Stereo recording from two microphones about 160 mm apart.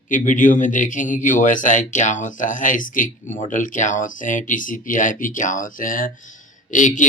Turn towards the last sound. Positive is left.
turn(degrees=50)  # may be behind; listen again after turning